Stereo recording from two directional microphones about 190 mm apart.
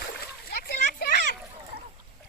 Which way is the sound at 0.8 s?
50° left (ahead or behind).